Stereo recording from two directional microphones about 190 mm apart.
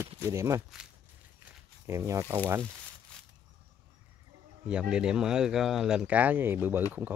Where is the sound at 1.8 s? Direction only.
15° right (ahead or behind).